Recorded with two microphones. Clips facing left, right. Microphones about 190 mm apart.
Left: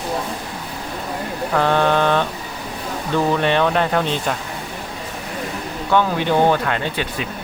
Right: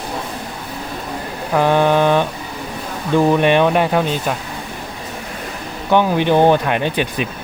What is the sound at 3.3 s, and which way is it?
Speech, 15° right (ahead or behind).